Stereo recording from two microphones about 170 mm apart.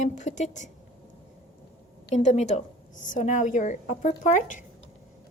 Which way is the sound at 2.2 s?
45° left (ahead or behind).